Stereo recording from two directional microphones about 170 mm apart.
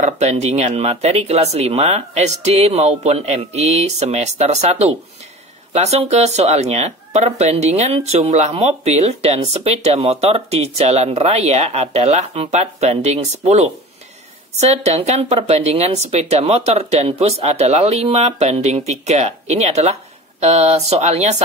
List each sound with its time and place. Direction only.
0.0 s speech: 40° right (ahead or behind)